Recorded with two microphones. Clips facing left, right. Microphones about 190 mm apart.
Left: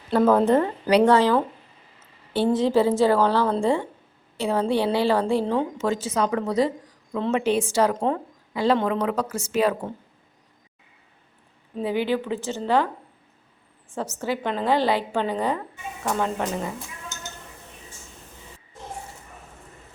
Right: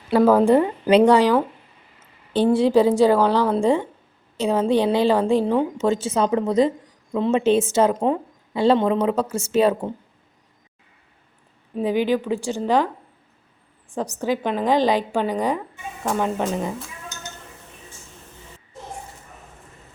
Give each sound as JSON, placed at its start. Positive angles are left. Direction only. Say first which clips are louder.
{"t": 0.1, "sound": "a woman's voice", "louder": "right 3 dB", "side_deg": -5}
{"t": 5.7, "sound": "a woman's voice", "louder": "right 4 dB", "side_deg": -25}
{"t": 11.8, "sound": "a woman's voice", "louder": "right 4 dB", "side_deg": -15}
{"t": 13.9, "sound": "a woman's voice", "louder": "right 4 dB", "side_deg": -15}